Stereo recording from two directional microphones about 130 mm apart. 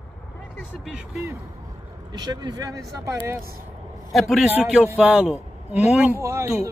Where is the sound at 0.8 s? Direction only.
5° right (ahead or behind).